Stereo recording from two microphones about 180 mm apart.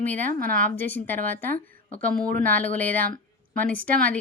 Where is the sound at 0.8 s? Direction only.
10° left (ahead or behind).